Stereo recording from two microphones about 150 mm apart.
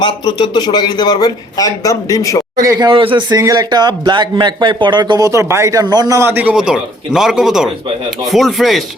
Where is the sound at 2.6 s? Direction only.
25° right (ahead or behind).